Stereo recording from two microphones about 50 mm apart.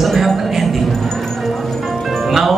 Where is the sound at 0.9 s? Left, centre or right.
Centre.